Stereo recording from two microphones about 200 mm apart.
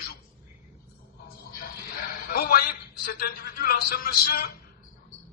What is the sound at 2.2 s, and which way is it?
A man's voice, 50° left (ahead or behind).